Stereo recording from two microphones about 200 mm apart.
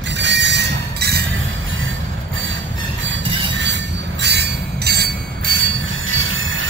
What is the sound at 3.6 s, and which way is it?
Train, 65° right (ahead or behind).